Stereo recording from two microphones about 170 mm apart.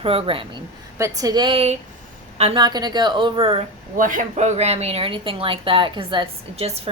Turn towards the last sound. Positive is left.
turn(degrees=-35)  # may be behind; listen again after turning